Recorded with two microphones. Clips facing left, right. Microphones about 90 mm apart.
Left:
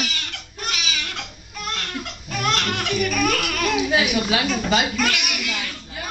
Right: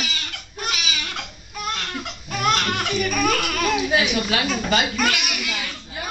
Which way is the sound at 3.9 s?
10° left (ahead or behind).